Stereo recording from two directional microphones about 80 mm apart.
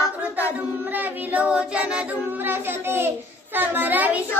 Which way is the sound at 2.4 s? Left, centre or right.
Right.